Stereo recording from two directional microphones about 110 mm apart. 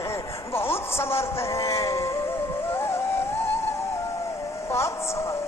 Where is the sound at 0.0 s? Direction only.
25° left (ahead or behind).